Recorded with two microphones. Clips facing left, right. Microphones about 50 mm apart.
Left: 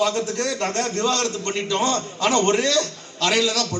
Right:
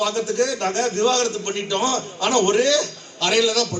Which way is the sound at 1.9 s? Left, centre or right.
Left.